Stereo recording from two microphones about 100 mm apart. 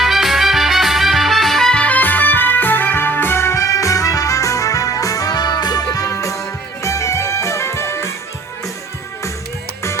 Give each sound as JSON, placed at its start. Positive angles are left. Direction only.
{"t": 0.0, "sound": "music", "side_deg": 0}